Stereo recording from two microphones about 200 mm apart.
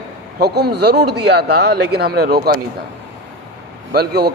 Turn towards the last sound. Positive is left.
turn(degrees=-55)  # may be behind; listen again after turning